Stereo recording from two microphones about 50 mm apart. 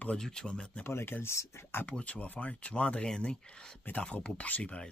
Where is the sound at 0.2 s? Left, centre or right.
Centre.